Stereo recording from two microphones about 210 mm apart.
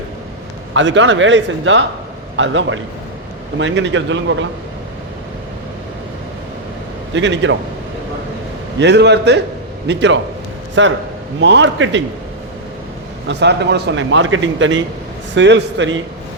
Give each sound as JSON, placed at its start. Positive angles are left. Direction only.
{"t": 0.7, "sound": "a man's voice", "side_deg": -60}
{"t": 7.1, "sound": "a man's voice", "side_deg": -60}
{"t": 8.8, "sound": "a man's voice", "side_deg": -55}
{"t": 13.2, "sound": "a man's voice", "side_deg": -55}